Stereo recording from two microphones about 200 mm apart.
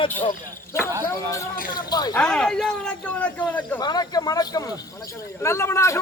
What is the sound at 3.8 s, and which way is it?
A man's voice, 20° left (ahead or behind).